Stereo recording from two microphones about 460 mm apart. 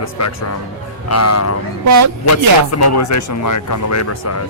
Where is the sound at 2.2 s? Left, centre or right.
Left.